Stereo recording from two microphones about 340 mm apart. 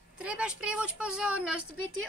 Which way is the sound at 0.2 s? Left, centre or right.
Centre.